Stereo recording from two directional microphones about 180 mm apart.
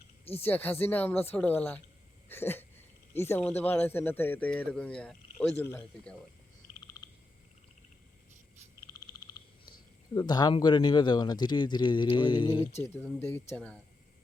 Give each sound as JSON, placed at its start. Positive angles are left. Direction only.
{"t": 0.4, "sound": "speech", "side_deg": 10}
{"t": 10.2, "sound": "speech", "side_deg": 25}
{"t": 12.8, "sound": "speech", "side_deg": 10}